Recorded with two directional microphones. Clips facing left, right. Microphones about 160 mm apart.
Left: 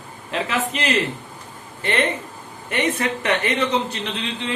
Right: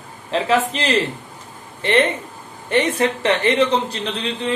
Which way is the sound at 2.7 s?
30° right (ahead or behind).